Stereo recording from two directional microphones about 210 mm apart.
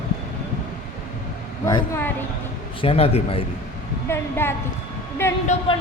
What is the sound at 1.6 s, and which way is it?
Speech, 15° left (ahead or behind).